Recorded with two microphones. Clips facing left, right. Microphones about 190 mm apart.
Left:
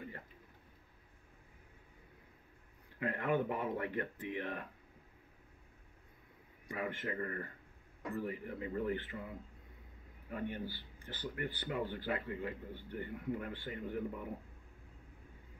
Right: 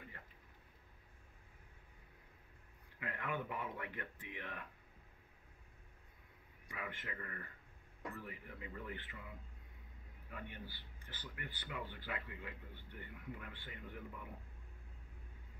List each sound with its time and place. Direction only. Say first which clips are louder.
3.0 s speech: left 9 dB; 35° left (ahead or behind)
6.7 s speech: left 9 dB; 40° left (ahead or behind)
10.3 s speech: left 10 dB; 35° left (ahead or behind)